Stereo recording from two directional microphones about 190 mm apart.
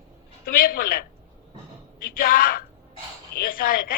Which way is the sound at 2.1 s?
50° left (ahead or behind).